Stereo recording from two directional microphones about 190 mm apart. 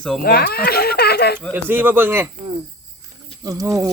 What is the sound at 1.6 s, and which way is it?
Speech, 10° right (ahead or behind).